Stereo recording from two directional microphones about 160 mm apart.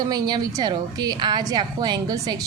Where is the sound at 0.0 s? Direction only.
25° right (ahead or behind).